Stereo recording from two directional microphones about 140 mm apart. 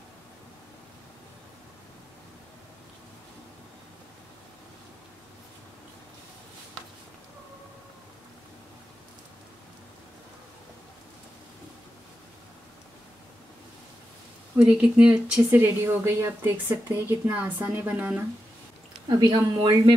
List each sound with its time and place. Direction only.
14.7 s speech: 10° right (ahead or behind)
19.0 s speech: 30° right (ahead or behind)